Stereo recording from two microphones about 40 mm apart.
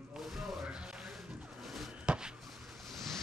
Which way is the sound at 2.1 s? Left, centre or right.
Centre.